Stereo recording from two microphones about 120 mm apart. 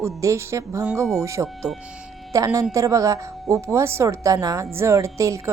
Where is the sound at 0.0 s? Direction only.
25° right (ahead or behind).